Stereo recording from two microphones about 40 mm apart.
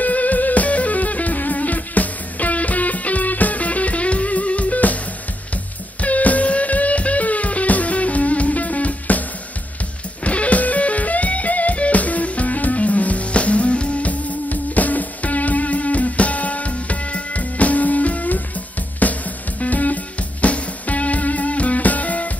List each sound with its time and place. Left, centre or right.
0.0 s music: left
5.9 s music: left
10.2 s music: left
14.5 s music: left